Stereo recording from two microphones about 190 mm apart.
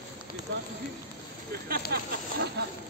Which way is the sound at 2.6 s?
60° right (ahead or behind).